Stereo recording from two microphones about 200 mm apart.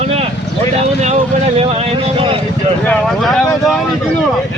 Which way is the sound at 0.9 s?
35° right (ahead or behind).